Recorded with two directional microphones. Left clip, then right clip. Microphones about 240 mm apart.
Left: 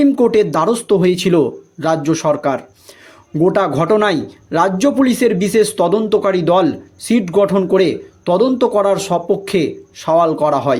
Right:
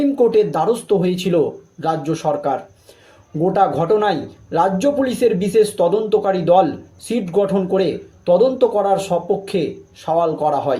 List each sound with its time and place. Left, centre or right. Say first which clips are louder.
0.0 s speech: left 2 dB; left